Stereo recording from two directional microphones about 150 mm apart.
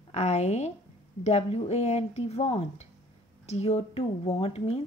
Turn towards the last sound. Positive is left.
turn(degrees=45)  # may be behind; listen again after turning